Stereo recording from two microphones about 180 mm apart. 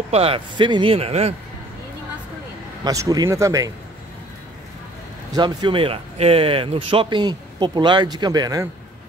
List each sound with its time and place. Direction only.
0.1 s speech: 30° right (ahead or behind)
2.8 s speech: 20° right (ahead or behind)
5.3 s speech: 25° right (ahead or behind)